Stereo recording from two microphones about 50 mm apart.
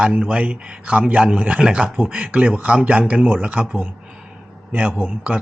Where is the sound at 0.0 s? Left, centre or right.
Centre.